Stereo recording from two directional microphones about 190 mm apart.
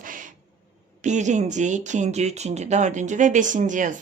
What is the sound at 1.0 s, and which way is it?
A woman's voice, 40° right (ahead or behind).